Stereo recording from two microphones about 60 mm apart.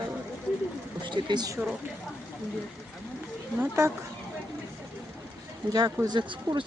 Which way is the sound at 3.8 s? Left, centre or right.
Right.